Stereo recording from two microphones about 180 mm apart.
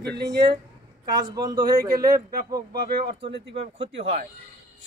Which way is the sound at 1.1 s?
20° right (ahead or behind).